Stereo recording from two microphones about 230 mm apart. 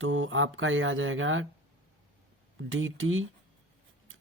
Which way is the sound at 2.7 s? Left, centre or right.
Right.